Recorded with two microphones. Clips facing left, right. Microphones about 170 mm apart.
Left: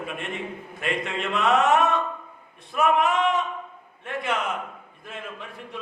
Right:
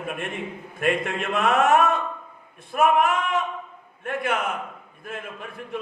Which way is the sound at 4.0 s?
50° right (ahead or behind).